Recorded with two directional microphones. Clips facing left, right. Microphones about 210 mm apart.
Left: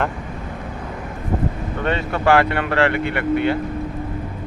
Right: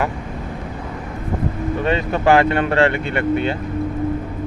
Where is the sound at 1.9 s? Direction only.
20° right (ahead or behind).